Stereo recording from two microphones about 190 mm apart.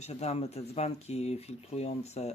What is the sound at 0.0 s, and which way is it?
Speech, 35° left (ahead or behind).